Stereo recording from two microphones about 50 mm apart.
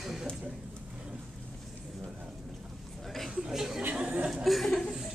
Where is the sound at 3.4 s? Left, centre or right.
Centre.